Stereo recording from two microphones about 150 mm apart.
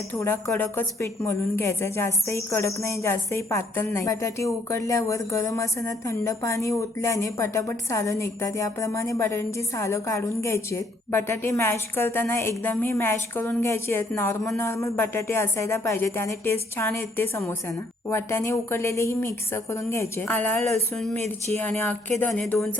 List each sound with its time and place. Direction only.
0.1 s a woman's voice: 15° left (ahead or behind)